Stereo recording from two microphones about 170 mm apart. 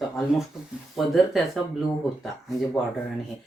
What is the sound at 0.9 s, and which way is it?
Speech, centre (ahead or behind).